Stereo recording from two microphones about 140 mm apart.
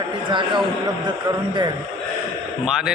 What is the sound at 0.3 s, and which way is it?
Speech, 35° right (ahead or behind).